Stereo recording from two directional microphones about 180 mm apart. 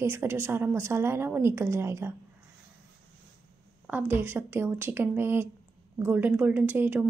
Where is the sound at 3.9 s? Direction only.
10° right (ahead or behind).